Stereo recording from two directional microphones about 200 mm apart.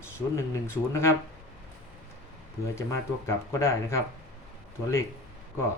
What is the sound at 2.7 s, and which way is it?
Speech, 15° left (ahead or behind).